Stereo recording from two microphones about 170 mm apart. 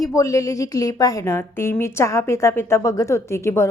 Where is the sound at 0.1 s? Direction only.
20° left (ahead or behind).